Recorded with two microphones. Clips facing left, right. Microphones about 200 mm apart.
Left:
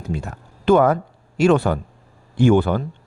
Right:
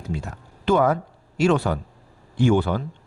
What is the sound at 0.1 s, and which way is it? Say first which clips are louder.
Speech: left 3 dB; 55° left (ahead or behind).